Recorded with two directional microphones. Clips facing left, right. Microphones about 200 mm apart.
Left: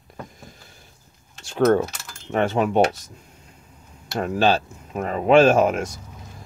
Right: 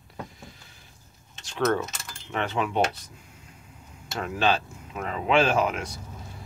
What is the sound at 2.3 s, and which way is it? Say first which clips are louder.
Speech: left 7 dB; 45° left (ahead or behind).